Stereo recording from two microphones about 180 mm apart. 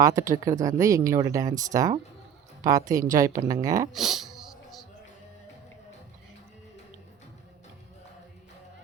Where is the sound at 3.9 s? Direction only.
Centre (ahead or behind).